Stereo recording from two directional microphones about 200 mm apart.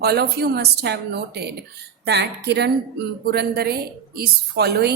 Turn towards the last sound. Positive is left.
turn(degrees=-55)  # may be behind; listen again after turning